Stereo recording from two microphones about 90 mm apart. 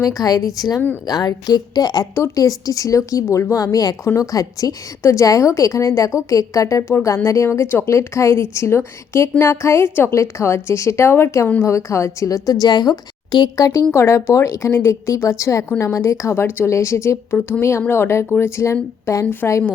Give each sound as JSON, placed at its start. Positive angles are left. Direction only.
{"t": 0.0, "sound": "a woman's voice", "side_deg": 40}
{"t": 2.1, "sound": "speech", "side_deg": 35}
{"t": 13.9, "sound": "speech", "side_deg": 30}